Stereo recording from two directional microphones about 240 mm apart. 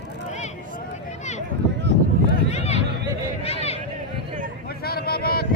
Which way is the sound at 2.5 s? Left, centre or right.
Left.